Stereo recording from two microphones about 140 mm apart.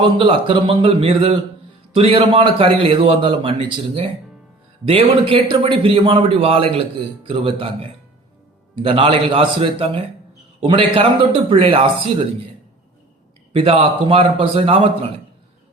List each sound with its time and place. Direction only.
0.0 s a man's voice: 35° right (ahead or behind)
13.5 s a man's voice: 40° right (ahead or behind)